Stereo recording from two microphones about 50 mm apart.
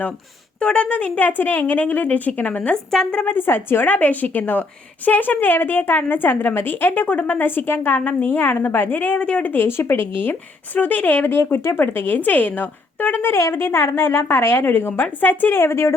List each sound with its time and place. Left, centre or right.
0.6 s speech: left
2.7 s speech: centre
3.2 s a woman's voice: left
3.9 s a woman's voice: left
9.1 s speech: left
9.5 s a woman's voice: left
13.3 s a woman's voice: left